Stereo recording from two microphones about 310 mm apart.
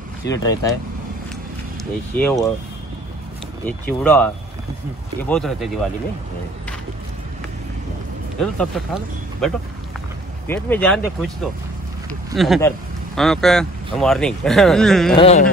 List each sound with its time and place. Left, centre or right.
0.2 s speech: centre
2.1 s speech: centre
3.6 s speech: centre
5.3 s speech: centre
8.4 s speech: centre
12.4 s speech: centre
15.1 s carnatic music: left